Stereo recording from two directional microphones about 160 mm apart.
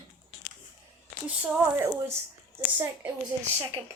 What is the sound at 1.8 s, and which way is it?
Speech, 15° right (ahead or behind).